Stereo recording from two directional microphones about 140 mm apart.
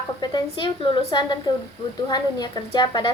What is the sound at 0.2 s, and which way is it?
A woman's voice, 35° left (ahead or behind).